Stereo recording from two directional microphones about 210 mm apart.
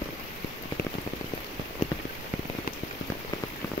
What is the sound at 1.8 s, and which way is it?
Rain on surface, 30° left (ahead or behind).